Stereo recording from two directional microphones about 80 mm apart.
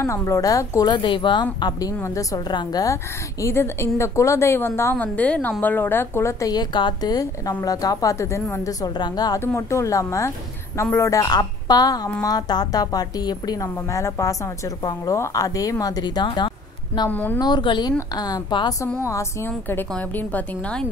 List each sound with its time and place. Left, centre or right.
0.0 s a woman's voice: left
4.9 s a woman's voice: centre
6.4 s a woman's voice: left
8.8 s a woman's voice: left
9.4 s a woman's voice: left
11.2 s a woman's voice: left
13.8 s a woman's voice: left
17.1 s a woman's voice: left
17.4 s a woman's voice: left
18.1 s a woman's voice: left
19.4 s a woman's voice: left